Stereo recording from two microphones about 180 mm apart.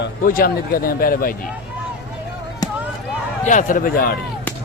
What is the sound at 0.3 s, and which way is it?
Speech, 50° left (ahead or behind).